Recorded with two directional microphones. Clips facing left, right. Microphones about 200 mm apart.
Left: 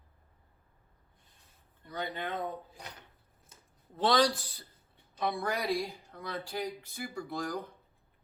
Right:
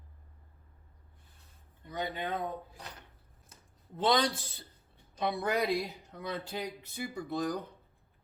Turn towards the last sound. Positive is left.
turn(degrees=-20)  # may be behind; listen again after turning